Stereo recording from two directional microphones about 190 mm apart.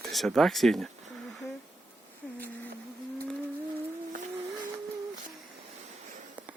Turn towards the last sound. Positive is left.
turn(degrees=-45)  # may be behind; listen again after turning